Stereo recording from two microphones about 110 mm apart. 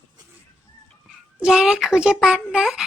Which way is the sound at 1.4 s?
5° right (ahead or behind).